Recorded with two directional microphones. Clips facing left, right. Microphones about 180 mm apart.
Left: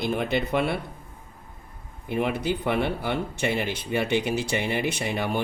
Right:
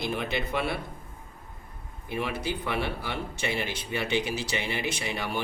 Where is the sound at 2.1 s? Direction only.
55° left (ahead or behind).